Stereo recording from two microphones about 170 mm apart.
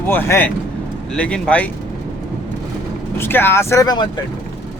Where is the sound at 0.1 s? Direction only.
10° left (ahead or behind).